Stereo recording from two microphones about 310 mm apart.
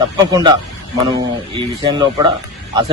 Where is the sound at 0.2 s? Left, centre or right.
Centre.